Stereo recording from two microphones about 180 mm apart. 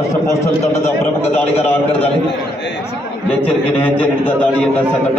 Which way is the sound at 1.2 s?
35° left (ahead or behind).